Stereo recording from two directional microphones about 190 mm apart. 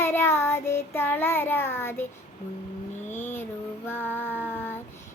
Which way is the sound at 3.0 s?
10° left (ahead or behind).